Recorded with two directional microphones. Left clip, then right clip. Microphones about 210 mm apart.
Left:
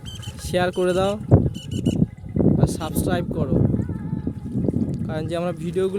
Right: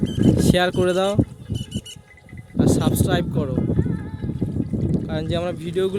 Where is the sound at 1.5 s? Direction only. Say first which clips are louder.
Left 6 dB; 25° left (ahead or behind).